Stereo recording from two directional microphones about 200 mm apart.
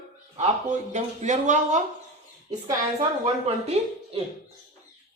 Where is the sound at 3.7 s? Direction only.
30° right (ahead or behind).